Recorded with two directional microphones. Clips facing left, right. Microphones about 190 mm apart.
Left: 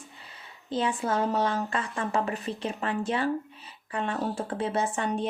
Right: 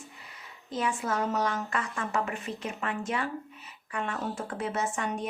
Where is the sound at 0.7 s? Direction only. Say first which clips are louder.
Left 3 dB; 30° left (ahead or behind).